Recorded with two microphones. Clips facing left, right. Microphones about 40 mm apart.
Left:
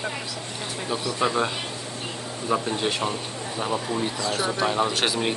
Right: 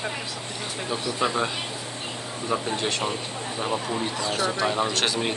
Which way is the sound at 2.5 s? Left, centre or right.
Centre.